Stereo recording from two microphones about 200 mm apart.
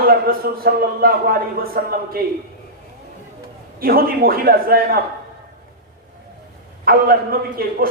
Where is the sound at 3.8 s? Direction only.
45° right (ahead or behind).